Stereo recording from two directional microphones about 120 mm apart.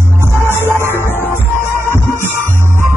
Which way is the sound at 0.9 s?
20° left (ahead or behind).